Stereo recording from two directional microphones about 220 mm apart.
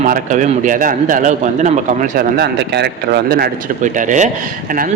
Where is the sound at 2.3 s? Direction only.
50° right (ahead or behind).